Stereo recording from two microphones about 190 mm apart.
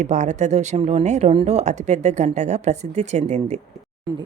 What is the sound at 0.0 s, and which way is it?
Speech, 40° right (ahead or behind).